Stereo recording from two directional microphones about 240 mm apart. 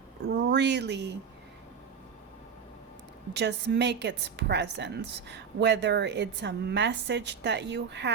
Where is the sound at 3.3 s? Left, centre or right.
Right.